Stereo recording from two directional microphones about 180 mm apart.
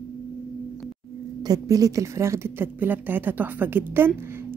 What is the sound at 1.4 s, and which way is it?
A woman's voice, 20° right (ahead or behind).